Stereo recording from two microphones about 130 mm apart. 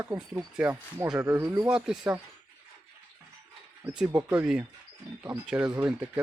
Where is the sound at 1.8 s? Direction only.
5° right (ahead or behind).